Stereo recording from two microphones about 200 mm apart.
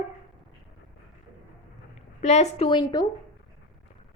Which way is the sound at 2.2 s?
35° left (ahead or behind).